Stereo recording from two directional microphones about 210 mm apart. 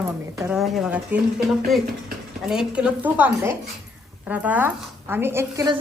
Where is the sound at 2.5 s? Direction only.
5° right (ahead or behind).